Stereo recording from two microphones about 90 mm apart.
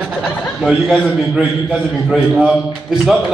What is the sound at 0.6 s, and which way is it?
Speech, centre (ahead or behind).